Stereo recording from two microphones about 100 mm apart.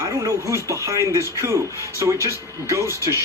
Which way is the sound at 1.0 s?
30° left (ahead or behind).